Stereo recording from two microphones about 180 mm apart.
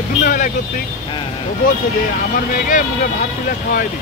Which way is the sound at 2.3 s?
50° left (ahead or behind).